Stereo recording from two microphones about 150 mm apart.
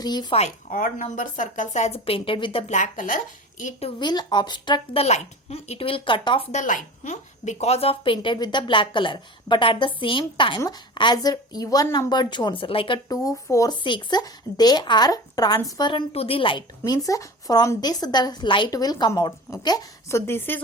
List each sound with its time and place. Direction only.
0.0 s a woman's voice: 30° left (ahead or behind)
0.7 s speech: 65° left (ahead or behind); by 2.7 s 40° left (ahead or behind)
2.7 s speech: 60° left (ahead or behind)
3.6 s speech: 50° left (ahead or behind)
4.0 s a woman's voice: 30° left (ahead or behind)
5.0 s a woman's voice: 45° left (ahead or behind)
6.5 s a woman's voice: 55° left (ahead or behind); by 13.0 s 35° left (ahead or behind)
13.1 s a woman's voice: 25° left (ahead or behind)